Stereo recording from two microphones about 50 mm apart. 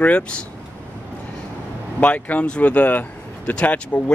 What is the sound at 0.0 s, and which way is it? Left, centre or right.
Speech, left.